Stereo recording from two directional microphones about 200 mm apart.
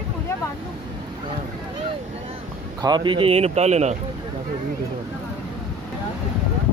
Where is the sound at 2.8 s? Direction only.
25° right (ahead or behind).